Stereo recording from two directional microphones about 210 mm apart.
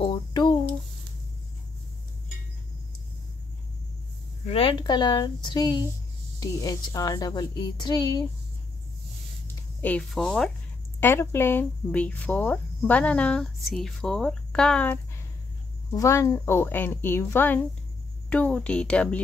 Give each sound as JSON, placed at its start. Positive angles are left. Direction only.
{"t": 0.0, "sound": "a sound", "side_deg": 20}
{"t": 4.5, "sound": "speech", "side_deg": 25}
{"t": 9.8, "sound": "speech", "side_deg": 5}